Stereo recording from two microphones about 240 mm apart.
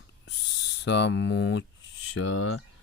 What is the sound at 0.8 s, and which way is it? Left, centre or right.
Speech, left.